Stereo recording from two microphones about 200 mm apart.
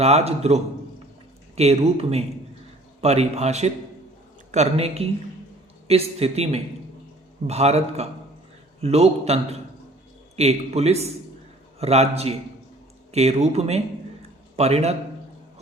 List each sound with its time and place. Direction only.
0.0 s a man's voice: 30° right (ahead or behind)